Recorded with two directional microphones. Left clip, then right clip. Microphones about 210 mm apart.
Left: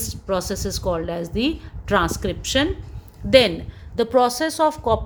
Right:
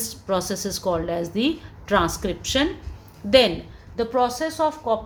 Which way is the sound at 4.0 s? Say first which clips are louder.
Left 4 dB; 40° left (ahead or behind).